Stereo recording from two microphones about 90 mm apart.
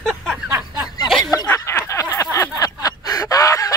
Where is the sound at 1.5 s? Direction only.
30° left (ahead or behind).